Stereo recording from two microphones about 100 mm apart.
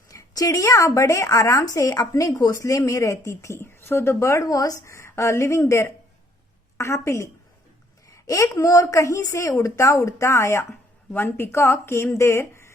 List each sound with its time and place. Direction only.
0.1 s a woman's voice: 35° left (ahead or behind)